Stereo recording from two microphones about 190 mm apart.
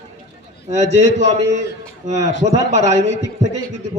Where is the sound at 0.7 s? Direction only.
35° right (ahead or behind).